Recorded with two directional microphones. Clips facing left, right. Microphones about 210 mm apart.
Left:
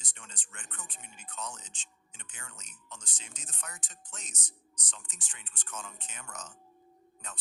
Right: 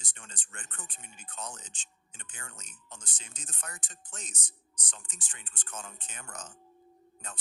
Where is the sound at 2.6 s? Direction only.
30° right (ahead or behind).